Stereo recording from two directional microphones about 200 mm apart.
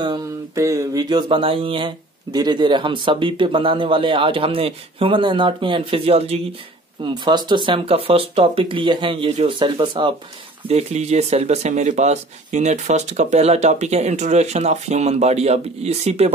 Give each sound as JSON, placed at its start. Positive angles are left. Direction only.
{"t": 0.0, "sound": "speech", "side_deg": -20}